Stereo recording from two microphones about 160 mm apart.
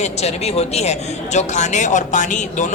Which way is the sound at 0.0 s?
40° left (ahead or behind).